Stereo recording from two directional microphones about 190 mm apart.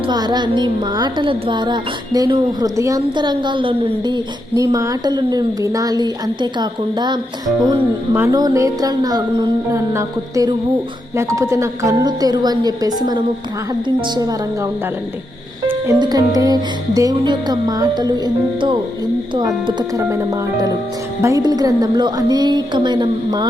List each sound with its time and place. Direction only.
0.1 s speech: 20° right (ahead or behind)
15.9 s speech: 20° right (ahead or behind)
19.3 s speech: 25° right (ahead or behind)